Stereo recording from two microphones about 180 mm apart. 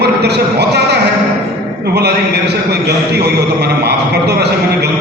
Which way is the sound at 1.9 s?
65° right (ahead or behind).